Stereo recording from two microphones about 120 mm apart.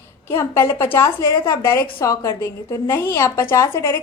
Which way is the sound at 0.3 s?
20° left (ahead or behind).